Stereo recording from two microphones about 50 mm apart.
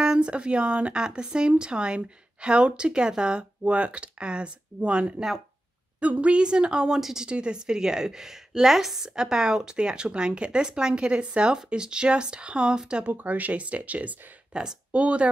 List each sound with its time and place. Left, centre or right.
0.0 s speech: centre
7.0 s a woman's voice: centre
7.2 s a woman's voice: centre
13.1 s speech: right
14.5 s speech: centre